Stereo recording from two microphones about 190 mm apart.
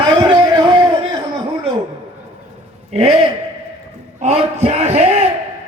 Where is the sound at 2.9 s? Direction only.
35° right (ahead or behind).